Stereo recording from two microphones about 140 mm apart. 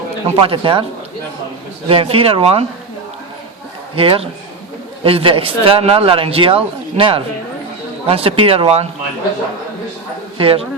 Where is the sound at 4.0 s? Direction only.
40° right (ahead or behind).